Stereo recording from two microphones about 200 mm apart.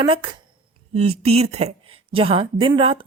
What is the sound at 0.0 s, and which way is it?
A woman's voice, 25° right (ahead or behind).